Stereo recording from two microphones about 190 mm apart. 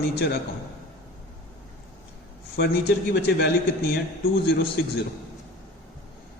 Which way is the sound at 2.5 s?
55° left (ahead or behind).